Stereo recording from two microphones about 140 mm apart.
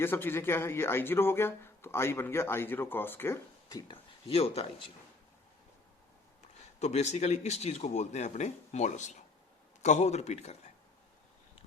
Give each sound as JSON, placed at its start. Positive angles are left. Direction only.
{"t": 0.0, "sound": "speech", "side_deg": 15}
{"t": 3.9, "sound": "speech", "side_deg": 45}
{"t": 6.7, "sound": "speech", "side_deg": 50}